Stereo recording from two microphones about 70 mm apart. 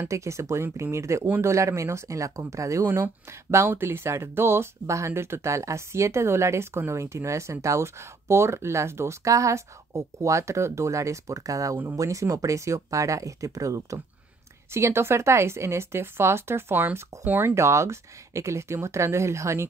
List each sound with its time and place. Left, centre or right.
0.1 s speech: right
14.7 s a woman's voice: right
17.6 s speech: right